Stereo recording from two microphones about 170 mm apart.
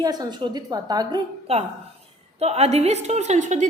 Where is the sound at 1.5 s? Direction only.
35° right (ahead or behind).